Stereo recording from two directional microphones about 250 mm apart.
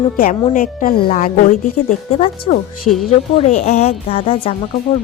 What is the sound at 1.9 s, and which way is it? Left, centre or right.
Speech, left.